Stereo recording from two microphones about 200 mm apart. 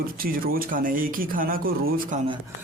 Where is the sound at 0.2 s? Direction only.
45° right (ahead or behind).